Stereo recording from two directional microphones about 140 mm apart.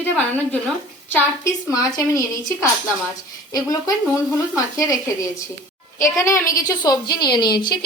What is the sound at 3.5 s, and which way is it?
Speech, 25° left (ahead or behind).